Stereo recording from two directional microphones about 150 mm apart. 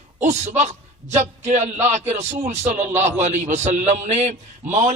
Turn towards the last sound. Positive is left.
turn(degrees=-55)  # may be behind; listen again after turning